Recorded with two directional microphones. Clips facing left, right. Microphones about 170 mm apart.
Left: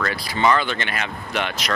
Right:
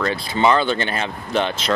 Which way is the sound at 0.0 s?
25° right (ahead or behind).